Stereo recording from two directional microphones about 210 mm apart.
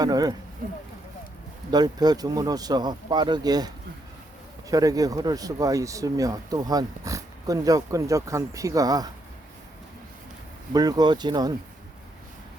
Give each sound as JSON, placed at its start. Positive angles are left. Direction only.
{"t": 0.0, "sound": "speech", "side_deg": -20}
{"t": 1.7, "sound": "speech", "side_deg": -20}
{"t": 4.7, "sound": "speech", "side_deg": -15}
{"t": 10.8, "sound": "speech", "side_deg": -20}